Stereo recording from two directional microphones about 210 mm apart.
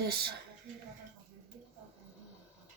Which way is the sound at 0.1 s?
50° right (ahead or behind).